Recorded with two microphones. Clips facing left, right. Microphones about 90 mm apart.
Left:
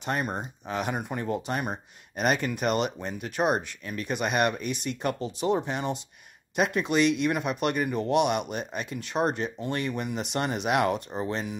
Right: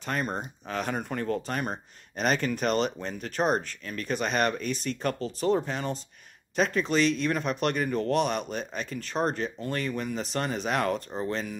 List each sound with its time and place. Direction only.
0.0 s speech: 15° left (ahead or behind)